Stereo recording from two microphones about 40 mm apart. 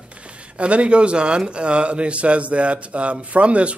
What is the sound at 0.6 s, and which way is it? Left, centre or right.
Speech, right.